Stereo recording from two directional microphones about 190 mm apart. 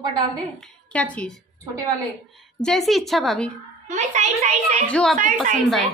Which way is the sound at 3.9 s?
40° right (ahead or behind).